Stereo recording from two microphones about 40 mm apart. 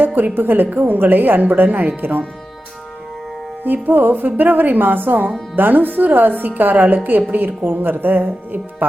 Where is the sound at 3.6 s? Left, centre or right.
Right.